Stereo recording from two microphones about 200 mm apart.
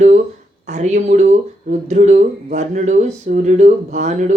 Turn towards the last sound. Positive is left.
turn(degrees=-35)  # may be behind; listen again after turning